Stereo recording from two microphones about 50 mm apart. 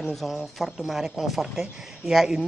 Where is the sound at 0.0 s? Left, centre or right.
Centre.